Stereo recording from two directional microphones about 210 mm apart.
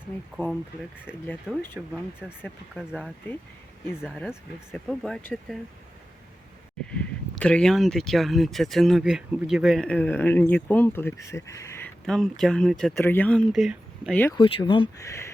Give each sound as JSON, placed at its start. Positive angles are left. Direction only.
{"t": 0.4, "sound": "speech", "side_deg": 10}
{"t": 2.2, "sound": "speech", "side_deg": -5}
{"t": 6.9, "sound": "speech", "side_deg": 5}
{"t": 12.0, "sound": "speech", "side_deg": 0}
{"t": 14.3, "sound": "speech", "side_deg": 25}